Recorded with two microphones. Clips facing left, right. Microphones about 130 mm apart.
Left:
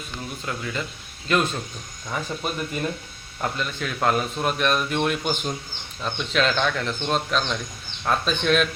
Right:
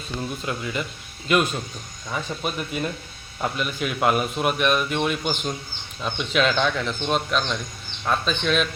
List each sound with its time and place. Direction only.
0.3 s speech: 20° right (ahead or behind)
2.0 s speech: 5° right (ahead or behind)